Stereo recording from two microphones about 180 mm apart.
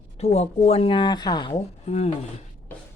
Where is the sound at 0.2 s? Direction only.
35° left (ahead or behind).